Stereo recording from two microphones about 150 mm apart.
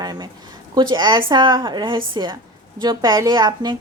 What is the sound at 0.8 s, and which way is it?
A woman's voice, 30° right (ahead or behind).